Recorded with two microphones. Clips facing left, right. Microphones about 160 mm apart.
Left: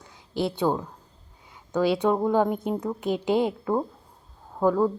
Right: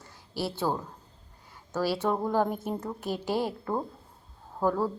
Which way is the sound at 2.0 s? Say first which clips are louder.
Left 5 dB; 15° left (ahead or behind).